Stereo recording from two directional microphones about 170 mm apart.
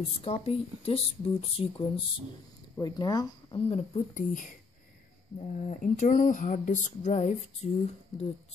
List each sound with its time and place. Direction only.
0.2 s speech: 35° left (ahead or behind)
3.6 s speech: 40° left (ahead or behind)